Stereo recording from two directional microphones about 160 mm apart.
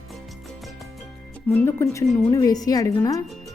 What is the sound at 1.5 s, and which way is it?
A woman's voice, 15° left (ahead or behind).